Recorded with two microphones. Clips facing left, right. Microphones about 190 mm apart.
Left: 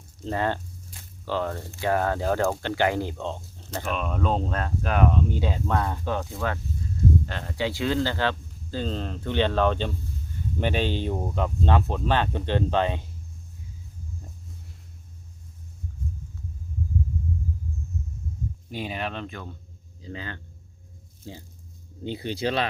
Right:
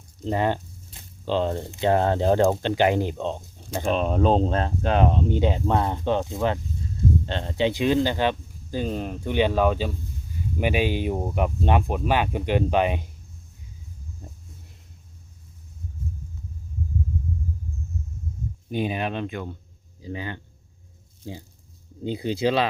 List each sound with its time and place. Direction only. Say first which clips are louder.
0.2 s speech: right 3 dB; 15° right (ahead or behind)
3.8 s speech: right 6 dB; 30° right (ahead or behind); by 13.1 s 15° right (ahead or behind)
14.2 s a sound: right 3 dB; 20° right (ahead or behind)
18.7 s speech: right 6 dB; 20° right (ahead or behind)